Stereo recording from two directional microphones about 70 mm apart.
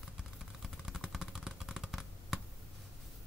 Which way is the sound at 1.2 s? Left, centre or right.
Centre.